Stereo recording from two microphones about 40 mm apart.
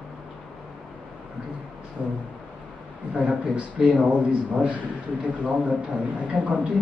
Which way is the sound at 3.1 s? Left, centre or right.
Right.